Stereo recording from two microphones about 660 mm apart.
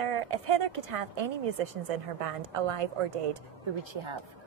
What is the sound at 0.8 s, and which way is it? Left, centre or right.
A woman's voice, right.